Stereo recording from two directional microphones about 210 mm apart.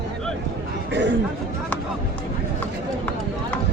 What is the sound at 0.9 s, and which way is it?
Chatter, 55° right (ahead or behind).